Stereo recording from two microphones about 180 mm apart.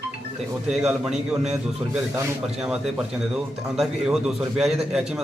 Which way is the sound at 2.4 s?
5° right (ahead or behind).